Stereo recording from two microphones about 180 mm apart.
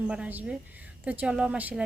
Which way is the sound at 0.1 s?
10° right (ahead or behind).